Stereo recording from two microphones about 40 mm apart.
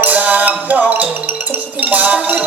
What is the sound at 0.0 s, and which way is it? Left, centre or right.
Music, right.